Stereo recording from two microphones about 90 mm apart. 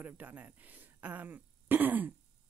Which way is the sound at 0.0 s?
20° right (ahead or behind).